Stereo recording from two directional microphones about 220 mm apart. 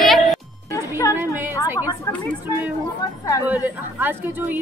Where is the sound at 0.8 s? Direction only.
15° left (ahead or behind).